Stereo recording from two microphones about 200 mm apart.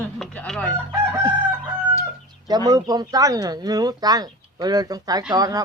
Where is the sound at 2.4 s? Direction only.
20° right (ahead or behind).